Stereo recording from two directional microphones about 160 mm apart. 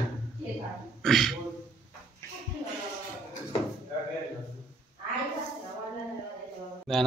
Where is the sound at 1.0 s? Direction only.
Centre (ahead or behind).